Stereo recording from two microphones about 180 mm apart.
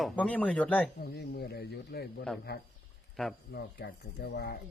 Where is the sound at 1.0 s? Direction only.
60° left (ahead or behind).